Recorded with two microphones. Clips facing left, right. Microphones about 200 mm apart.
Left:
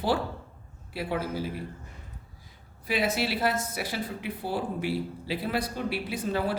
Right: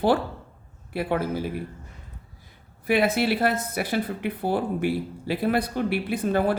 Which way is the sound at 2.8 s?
55° right (ahead or behind).